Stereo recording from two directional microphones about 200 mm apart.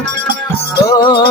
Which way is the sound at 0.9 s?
20° left (ahead or behind).